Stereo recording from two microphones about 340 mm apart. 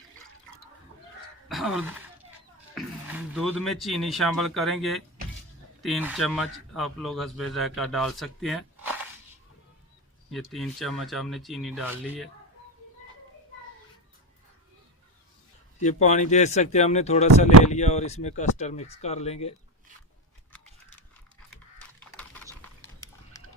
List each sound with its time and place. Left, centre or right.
1.5 s a sound: centre
2.7 s a man's voice: centre
10.5 s a man's voice: centre
15.8 s speech: left
22.8 s pig: centre